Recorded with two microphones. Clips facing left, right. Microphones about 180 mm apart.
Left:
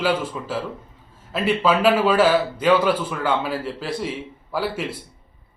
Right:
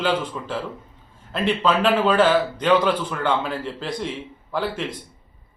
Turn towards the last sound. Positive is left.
turn(degrees=5)  # may be behind; listen again after turning